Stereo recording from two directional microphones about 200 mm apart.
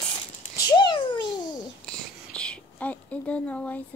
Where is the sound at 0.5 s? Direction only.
20° left (ahead or behind).